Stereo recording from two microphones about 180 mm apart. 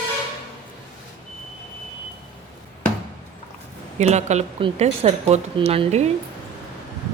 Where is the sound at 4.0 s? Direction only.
40° right (ahead or behind).